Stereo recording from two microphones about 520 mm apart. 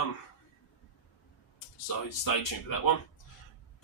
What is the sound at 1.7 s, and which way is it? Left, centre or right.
Speech, left.